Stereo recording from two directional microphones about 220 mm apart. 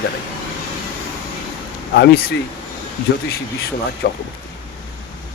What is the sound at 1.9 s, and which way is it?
Speech, 45° left (ahead or behind).